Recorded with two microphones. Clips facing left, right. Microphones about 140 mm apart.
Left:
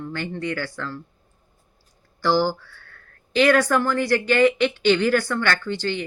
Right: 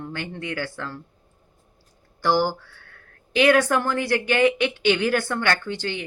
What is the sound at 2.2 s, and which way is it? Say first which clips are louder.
Speech: left 1 dB; 15° right (ahead or behind).